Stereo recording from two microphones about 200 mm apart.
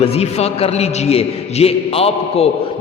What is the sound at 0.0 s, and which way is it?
A man's voice, 30° left (ahead or behind).